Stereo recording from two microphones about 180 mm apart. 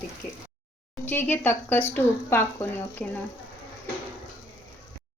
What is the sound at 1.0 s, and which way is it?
Speech, 10° left (ahead or behind).